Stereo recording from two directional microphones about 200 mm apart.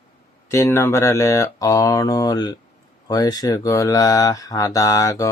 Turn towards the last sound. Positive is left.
turn(degrees=15)  # may be behind; listen again after turning